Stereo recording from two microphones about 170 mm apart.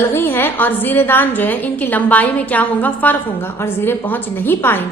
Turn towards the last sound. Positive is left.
turn(degrees=10)  # may be behind; listen again after turning